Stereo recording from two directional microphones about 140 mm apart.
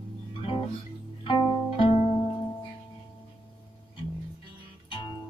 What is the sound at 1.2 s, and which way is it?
Music, 35° left (ahead or behind).